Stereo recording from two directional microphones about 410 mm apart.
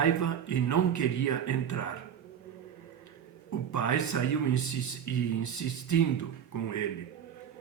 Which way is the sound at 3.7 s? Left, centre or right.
Left.